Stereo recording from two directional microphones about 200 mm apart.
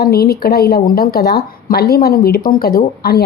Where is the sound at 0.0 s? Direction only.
50° left (ahead or behind).